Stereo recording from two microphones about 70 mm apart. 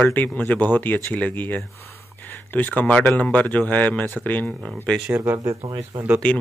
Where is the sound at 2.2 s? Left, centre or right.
Left.